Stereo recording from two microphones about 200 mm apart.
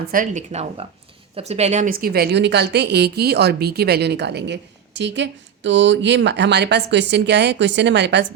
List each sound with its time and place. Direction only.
0.0 s a woman's voice: 45° right (ahead or behind)